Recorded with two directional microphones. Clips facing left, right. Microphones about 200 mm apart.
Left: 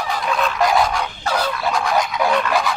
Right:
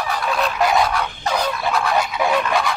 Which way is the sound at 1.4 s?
10° left (ahead or behind).